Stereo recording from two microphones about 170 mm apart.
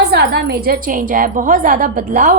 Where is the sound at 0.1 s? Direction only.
70° right (ahead or behind).